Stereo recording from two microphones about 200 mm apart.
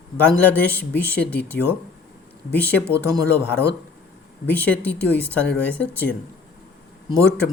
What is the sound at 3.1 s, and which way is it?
Speech, 10° left (ahead or behind).